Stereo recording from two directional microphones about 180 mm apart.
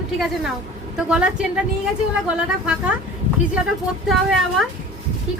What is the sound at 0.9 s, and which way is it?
Speech, 5° right (ahead or behind).